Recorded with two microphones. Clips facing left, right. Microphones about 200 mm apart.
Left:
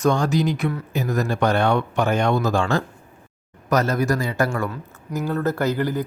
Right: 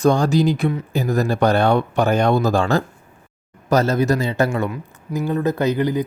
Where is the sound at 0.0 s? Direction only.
35° right (ahead or behind).